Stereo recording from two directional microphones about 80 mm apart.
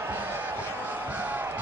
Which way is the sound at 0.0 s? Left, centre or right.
Right.